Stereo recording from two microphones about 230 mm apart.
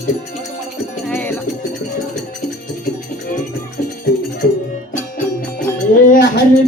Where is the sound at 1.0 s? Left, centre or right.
Centre.